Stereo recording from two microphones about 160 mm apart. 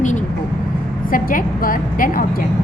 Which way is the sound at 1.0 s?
60° left (ahead or behind).